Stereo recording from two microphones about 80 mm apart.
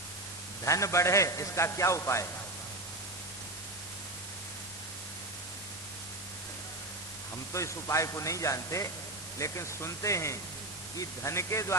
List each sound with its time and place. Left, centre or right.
0.6 s a man's voice: left
7.5 s a man's voice: left